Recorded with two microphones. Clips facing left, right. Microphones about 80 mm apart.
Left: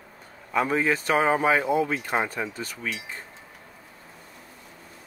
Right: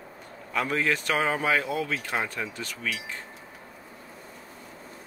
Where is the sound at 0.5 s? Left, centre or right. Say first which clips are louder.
Left 3 dB; centre.